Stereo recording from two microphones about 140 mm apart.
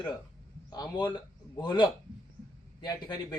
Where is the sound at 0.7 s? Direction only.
30° left (ahead or behind).